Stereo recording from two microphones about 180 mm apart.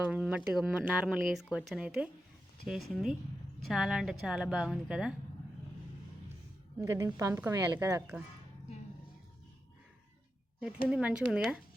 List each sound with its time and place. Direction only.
0.1 s speech: 10° right (ahead or behind)
6.8 s a woman's voice: 15° right (ahead or behind)
10.8 s speech: 5° right (ahead or behind)